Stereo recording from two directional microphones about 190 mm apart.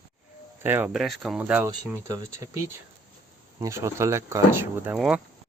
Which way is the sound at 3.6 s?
15° right (ahead or behind).